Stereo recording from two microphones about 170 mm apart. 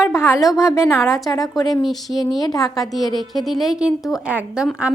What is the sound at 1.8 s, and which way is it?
Speech, centre (ahead or behind).